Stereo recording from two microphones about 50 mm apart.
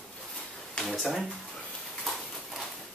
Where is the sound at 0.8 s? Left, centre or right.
Centre.